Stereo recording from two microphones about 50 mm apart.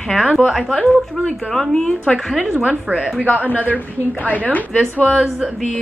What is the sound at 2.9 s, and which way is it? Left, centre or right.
Speech, centre.